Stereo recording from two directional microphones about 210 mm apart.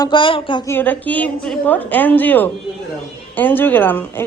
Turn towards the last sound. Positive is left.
turn(degrees=10)  # may be behind; listen again after turning